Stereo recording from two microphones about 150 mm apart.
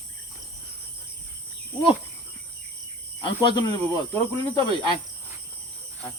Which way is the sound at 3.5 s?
25° left (ahead or behind).